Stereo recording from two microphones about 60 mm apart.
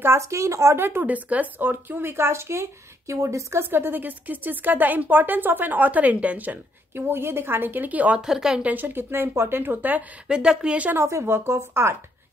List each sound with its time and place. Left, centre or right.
0.0 s speech: right
1.0 s speech: right
3.1 s a woman's voice: right
3.7 s speech: right
6.9 s speech: right
8.2 s speech: centre
8.6 s speech: right
10.2 s speech: centre
11.0 s speech: right